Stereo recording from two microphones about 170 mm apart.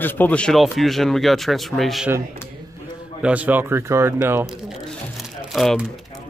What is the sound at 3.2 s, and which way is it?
Speech, 10° right (ahead or behind).